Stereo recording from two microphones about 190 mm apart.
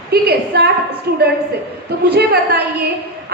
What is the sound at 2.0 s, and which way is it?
Speech, 55° right (ahead or behind).